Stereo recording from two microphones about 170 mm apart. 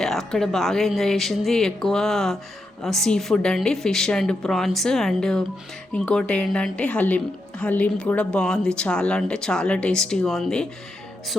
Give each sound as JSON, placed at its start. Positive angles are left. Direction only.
{"t": 0.0, "sound": "speech", "side_deg": 0}